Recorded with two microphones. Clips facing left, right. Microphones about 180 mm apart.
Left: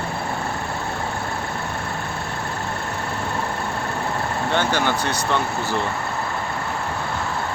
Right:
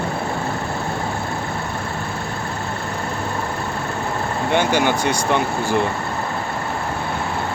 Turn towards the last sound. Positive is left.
turn(degrees=-15)  # may be behind; listen again after turning